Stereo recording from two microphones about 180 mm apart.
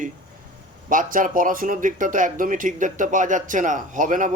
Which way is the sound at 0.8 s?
50° right (ahead or behind).